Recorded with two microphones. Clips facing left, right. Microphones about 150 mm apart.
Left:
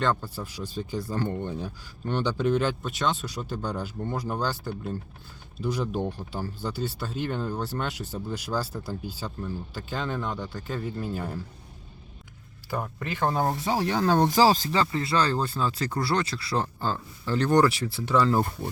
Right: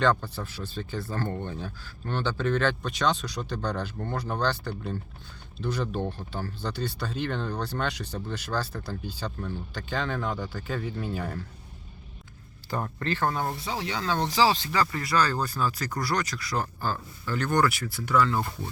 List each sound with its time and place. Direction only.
0.0 s speech: 5° left (ahead or behind)
5.5 s speech: 10° left (ahead or behind)
12.7 s speech: 10° left (ahead or behind)
13.3 s speech: 40° left (ahead or behind)
14.7 s speech: 25° left (ahead or behind)